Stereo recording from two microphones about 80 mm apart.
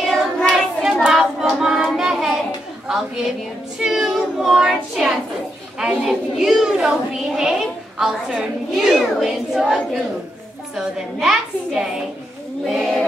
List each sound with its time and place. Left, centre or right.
0.0 s child singing: centre
1.0 s hands: centre
3.8 s child singing: centre
5.0 s a sound: centre
5.8 s a woman's voice: centre